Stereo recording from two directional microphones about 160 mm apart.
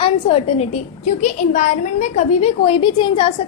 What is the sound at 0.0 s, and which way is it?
A woman's voice, 35° left (ahead or behind).